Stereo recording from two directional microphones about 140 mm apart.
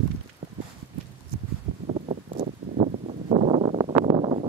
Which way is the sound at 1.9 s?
60° right (ahead or behind).